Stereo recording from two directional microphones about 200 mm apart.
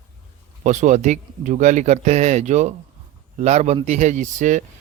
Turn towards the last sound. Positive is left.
turn(degrees=-40)  # may be behind; listen again after turning